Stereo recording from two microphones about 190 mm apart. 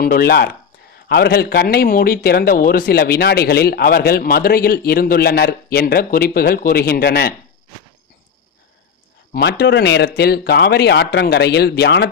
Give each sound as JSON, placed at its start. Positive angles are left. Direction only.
{"t": 0.0, "sound": "a man's voice", "side_deg": 50}
{"t": 9.3, "sound": "speech", "side_deg": 60}